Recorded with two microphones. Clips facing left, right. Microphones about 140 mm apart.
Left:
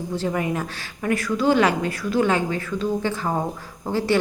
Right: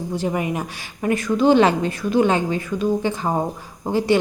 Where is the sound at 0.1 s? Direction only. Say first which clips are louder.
Right 1 dB; 15° right (ahead or behind).